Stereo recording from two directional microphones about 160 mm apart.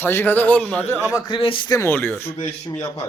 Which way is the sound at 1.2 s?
30° left (ahead or behind).